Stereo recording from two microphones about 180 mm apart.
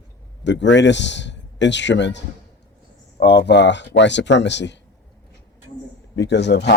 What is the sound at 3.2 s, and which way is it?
Speech, 65° left (ahead or behind).